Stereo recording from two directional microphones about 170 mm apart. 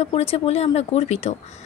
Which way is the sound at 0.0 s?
35° left (ahead or behind).